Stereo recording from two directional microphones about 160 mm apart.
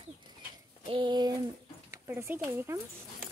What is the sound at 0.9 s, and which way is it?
Speech, 30° right (ahead or behind).